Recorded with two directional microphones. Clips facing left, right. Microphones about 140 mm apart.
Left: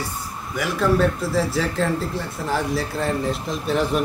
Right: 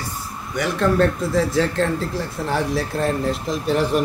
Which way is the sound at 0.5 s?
5° left (ahead or behind).